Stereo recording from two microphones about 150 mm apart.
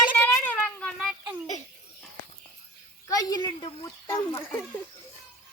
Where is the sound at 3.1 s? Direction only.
25° left (ahead or behind).